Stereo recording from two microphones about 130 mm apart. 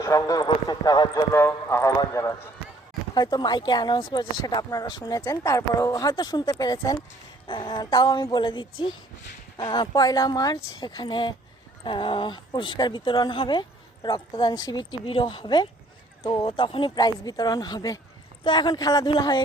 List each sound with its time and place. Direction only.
0.0 s speech: 25° left (ahead or behind)
7.4 s speech: 40° left (ahead or behind)